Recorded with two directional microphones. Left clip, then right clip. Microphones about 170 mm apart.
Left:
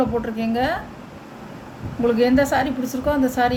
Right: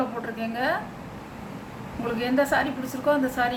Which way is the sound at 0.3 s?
50° left (ahead or behind).